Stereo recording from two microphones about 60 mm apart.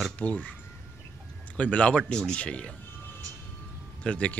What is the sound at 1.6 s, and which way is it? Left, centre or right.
Speech, centre.